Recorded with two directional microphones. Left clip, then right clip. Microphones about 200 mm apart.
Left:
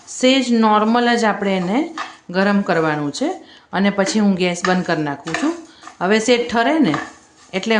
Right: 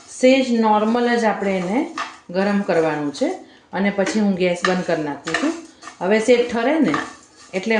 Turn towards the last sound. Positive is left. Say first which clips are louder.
# left 2 dB
turn(degrees=15)  # may be behind; listen again after turning